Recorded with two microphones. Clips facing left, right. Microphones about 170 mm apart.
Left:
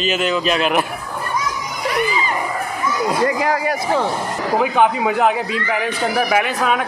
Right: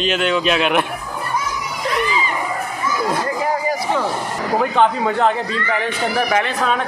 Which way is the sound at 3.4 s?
80° left.